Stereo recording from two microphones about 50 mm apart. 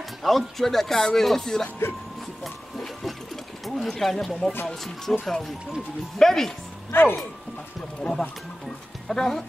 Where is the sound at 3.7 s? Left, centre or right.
Centre.